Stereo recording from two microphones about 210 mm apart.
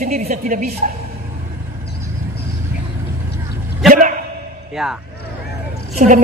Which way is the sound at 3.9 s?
40° right (ahead or behind).